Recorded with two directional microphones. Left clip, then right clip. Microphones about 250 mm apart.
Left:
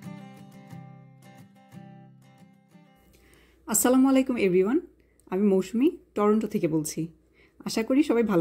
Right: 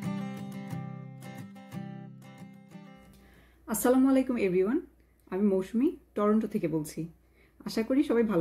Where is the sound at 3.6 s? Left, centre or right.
Left.